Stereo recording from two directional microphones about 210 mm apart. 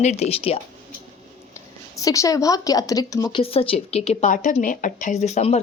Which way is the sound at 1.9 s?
15° left (ahead or behind).